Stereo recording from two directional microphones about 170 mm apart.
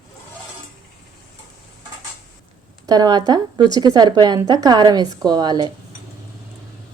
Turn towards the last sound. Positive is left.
turn(degrees=-25)  # may be behind; listen again after turning